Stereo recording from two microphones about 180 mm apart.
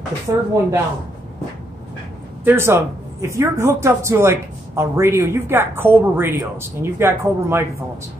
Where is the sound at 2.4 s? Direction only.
15° right (ahead or behind).